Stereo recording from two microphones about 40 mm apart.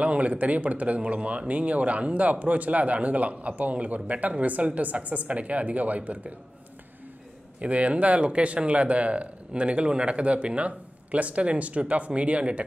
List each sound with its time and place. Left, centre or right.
0.0 s speech: right
7.6 s speech: right